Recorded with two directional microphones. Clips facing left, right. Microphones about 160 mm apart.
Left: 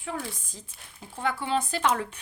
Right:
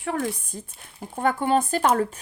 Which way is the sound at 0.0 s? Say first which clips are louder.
Right 8 dB; 65° right (ahead or behind).